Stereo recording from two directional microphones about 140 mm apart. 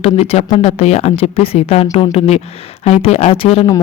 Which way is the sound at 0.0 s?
50° left (ahead or behind).